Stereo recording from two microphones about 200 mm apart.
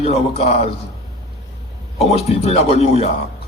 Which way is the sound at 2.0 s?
30° left (ahead or behind).